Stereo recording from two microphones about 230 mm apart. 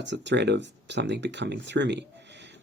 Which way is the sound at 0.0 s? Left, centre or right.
Right.